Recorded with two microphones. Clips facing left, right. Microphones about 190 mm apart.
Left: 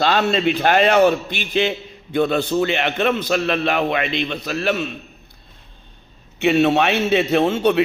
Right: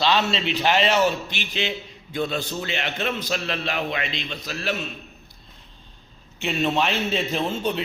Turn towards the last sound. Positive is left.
turn(degrees=75)  # may be behind; listen again after turning